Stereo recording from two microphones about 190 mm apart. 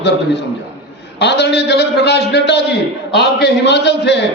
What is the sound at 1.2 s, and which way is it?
A man's voice, 65° left (ahead or behind).